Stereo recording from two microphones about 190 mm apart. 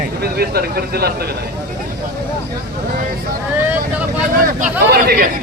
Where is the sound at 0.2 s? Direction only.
55° right (ahead or behind).